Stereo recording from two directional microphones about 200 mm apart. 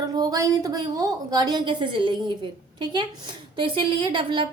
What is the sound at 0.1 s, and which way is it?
A woman's voice, 20° right (ahead or behind).